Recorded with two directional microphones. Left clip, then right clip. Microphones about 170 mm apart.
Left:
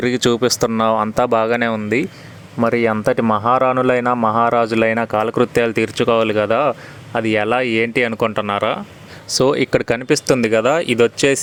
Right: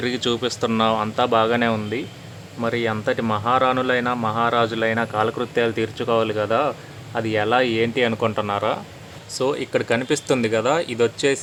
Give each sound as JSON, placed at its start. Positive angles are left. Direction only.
{"t": 0.0, "sound": "speech", "side_deg": 40}
{"t": 9.3, "sound": "speech", "side_deg": 50}